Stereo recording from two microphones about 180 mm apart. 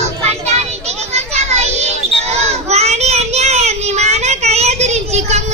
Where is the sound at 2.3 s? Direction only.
35° right (ahead or behind).